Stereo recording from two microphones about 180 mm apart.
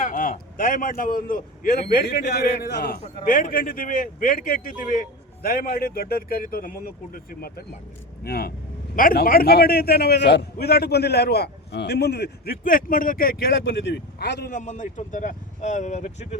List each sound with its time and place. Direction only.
0.0 s a man's voice: 50° left (ahead or behind); by 3.0 s 65° left (ahead or behind)
3.5 s a man's voice: 50° left (ahead or behind); by 14.5 s 65° left (ahead or behind)
14.5 s a man's voice: 45° left (ahead or behind)